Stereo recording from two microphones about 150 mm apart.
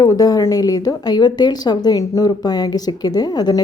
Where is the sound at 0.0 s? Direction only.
25° left (ahead or behind).